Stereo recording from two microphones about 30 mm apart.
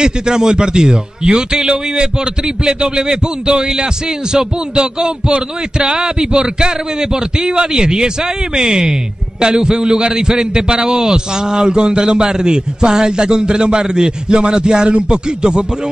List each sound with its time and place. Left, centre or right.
0.0 s a man's voice: right